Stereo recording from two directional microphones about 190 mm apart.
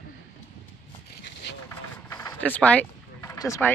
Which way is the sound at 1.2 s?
65° left (ahead or behind).